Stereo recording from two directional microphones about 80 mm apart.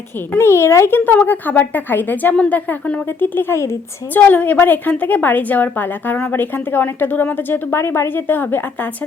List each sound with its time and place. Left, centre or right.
0.3 s a woman's voice: left